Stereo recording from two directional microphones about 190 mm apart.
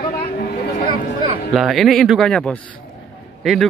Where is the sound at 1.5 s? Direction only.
Centre (ahead or behind).